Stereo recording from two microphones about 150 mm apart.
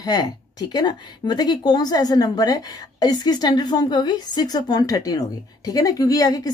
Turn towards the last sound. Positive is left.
turn(degrees=25)  # may be behind; listen again after turning